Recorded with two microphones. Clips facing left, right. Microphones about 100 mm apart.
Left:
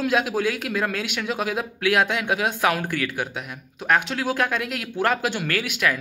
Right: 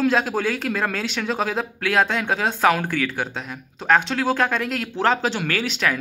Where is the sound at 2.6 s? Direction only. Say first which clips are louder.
Right 3 dB; 60° right (ahead or behind).